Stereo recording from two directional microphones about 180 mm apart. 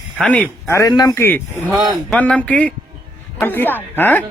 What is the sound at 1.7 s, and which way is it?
Speech, 20° right (ahead or behind).